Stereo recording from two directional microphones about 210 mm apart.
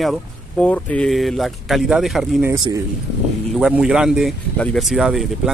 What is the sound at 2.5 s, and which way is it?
Speech, 15° right (ahead or behind).